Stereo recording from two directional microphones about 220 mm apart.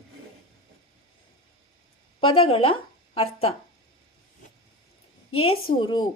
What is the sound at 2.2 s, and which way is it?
A woman's voice, 25° left (ahead or behind).